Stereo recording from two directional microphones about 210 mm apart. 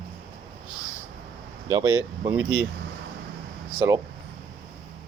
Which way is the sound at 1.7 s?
15° right (ahead or behind).